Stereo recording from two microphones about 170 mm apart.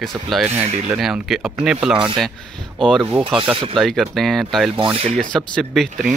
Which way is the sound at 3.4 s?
30° right (ahead or behind).